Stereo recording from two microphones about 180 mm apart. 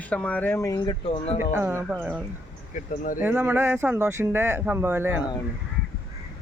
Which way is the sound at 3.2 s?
10° right (ahead or behind).